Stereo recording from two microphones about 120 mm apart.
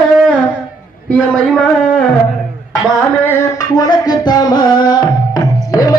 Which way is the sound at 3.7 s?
35° left (ahead or behind).